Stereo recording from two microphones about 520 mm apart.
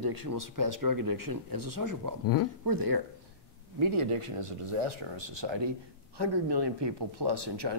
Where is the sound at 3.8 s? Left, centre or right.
Right.